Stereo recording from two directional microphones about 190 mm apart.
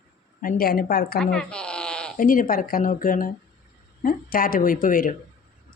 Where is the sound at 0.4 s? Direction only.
50° left (ahead or behind).